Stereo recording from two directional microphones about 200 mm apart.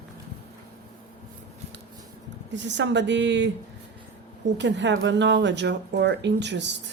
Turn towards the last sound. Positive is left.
turn(degrees=-60)  # may be behind; listen again after turning